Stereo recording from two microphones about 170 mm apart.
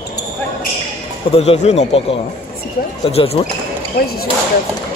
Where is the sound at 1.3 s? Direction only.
35° left (ahead or behind).